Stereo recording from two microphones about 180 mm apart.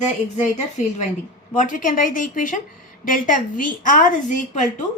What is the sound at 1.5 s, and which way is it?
A woman's voice, 45° left (ahead or behind).